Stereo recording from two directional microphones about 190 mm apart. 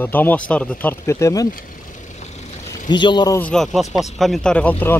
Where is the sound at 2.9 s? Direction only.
25° left (ahead or behind).